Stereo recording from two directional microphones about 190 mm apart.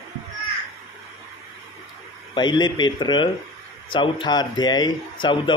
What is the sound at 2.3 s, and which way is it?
Speech, 25° left (ahead or behind).